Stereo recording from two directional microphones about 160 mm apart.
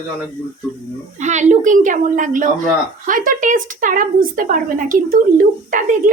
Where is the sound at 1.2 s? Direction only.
45° right (ahead or behind).